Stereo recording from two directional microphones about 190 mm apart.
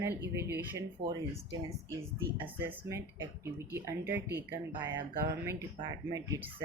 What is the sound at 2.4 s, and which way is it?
Speech, 10° right (ahead or behind).